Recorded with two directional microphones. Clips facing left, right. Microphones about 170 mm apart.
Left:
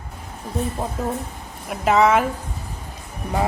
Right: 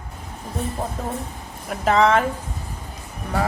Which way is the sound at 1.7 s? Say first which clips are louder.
Left 1 dB; 5° left (ahead or behind).